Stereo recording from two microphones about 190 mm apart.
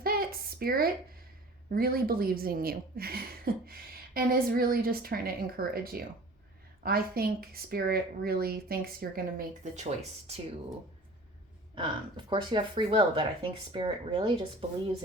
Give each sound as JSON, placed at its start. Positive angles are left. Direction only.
{"t": 0.0, "sound": "a sound", "side_deg": -50}
{"t": 1.7, "sound": "speech", "side_deg": -50}
{"t": 9.7, "sound": "speech", "side_deg": -35}
{"t": 11.7, "sound": "speech", "side_deg": -25}